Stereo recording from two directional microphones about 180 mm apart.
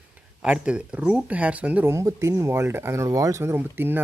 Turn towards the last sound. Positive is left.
turn(degrees=-10)  # may be behind; listen again after turning